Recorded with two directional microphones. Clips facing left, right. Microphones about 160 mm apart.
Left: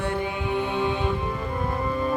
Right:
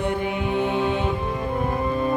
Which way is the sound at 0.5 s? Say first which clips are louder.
Right 2 dB; 20° right (ahead or behind).